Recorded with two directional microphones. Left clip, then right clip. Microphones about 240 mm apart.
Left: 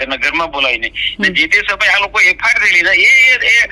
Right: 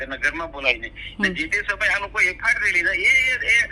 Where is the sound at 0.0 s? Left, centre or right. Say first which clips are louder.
Left 9 dB; left.